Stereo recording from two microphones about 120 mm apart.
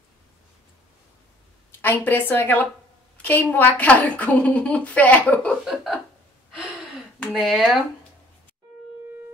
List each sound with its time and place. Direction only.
1.8 s speech: 15° left (ahead or behind)
7.3 s speech: centre (ahead or behind)